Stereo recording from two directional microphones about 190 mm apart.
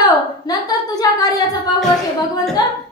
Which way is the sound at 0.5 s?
20° left (ahead or behind).